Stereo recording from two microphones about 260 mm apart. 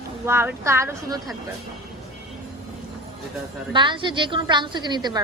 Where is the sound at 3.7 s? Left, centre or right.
Centre.